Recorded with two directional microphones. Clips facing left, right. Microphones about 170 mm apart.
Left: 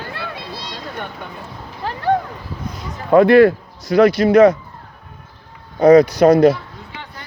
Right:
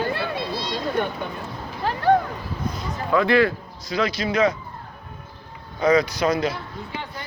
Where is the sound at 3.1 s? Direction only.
55° left (ahead or behind).